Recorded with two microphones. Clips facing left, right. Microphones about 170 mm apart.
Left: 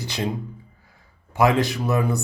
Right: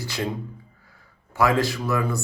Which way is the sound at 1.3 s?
20° left (ahead or behind).